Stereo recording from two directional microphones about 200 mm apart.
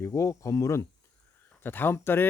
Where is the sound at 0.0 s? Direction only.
15° left (ahead or behind).